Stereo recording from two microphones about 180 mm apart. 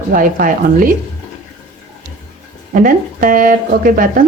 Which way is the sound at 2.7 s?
50° right (ahead or behind).